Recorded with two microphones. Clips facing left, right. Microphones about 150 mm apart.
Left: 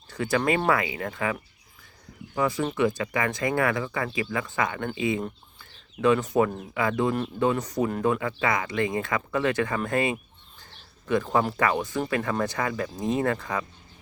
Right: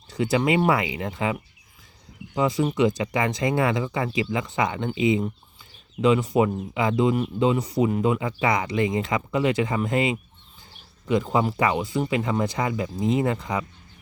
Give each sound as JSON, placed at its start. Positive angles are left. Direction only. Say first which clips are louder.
{"t": 0.2, "sound": "speech", "louder": "right 3 dB", "side_deg": -20}
{"t": 2.6, "sound": "speech", "louder": "right 3 dB", "side_deg": -20}
{"t": 5.5, "sound": "a sound", "louder": "right 4 dB", "side_deg": -15}
{"t": 6.7, "sound": "speech", "louder": "right 3 dB", "side_deg": -20}